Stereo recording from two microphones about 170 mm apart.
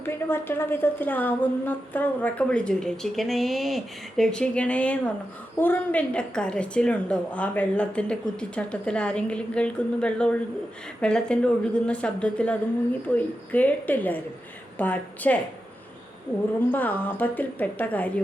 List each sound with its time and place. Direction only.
0.0 s a woman's voice: 15° left (ahead or behind)
16.6 s a woman's voice: 10° left (ahead or behind)